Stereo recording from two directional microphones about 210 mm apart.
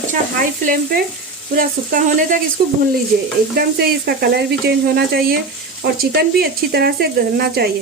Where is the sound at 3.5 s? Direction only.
45° right (ahead or behind).